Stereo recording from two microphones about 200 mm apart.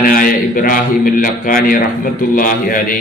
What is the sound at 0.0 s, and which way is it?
A man's voice, 45° left (ahead or behind).